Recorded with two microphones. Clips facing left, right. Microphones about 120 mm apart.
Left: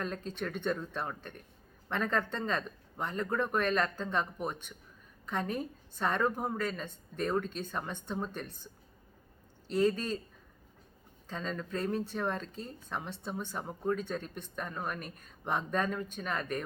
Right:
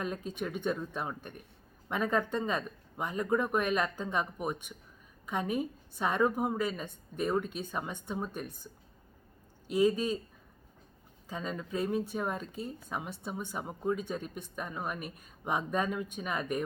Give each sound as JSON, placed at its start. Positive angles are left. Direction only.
{"t": 0.0, "sound": "speech", "side_deg": -10}
{"t": 11.3, "sound": "speech", "side_deg": -10}